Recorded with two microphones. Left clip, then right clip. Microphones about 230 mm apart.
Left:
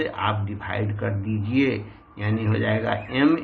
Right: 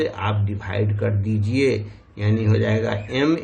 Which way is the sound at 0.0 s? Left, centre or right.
Right.